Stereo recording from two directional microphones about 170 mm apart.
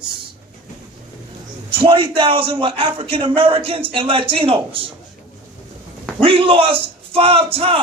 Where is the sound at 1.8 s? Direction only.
30° right (ahead or behind).